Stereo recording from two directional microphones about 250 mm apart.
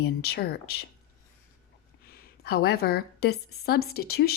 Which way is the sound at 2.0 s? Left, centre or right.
Left.